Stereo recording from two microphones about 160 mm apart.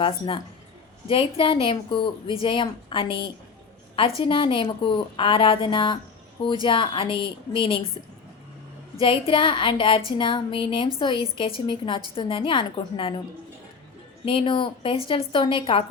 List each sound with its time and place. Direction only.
1.0 s a woman's voice: 35° left (ahead or behind)
9.0 s a woman's voice: 35° left (ahead or behind)
14.3 s a woman's voice: 30° left (ahead or behind)